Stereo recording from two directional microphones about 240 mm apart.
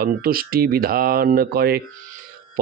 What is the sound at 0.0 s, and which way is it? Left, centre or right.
Speech, right.